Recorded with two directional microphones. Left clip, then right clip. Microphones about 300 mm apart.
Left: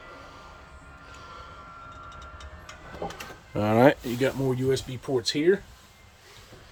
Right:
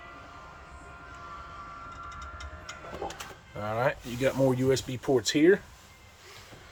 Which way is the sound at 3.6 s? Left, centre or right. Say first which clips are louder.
Left 9 dB; left.